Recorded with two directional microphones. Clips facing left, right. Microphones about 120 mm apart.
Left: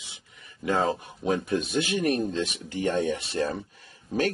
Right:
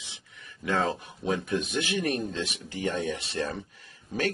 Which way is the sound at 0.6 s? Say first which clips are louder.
Left 2 dB; 35° left (ahead or behind).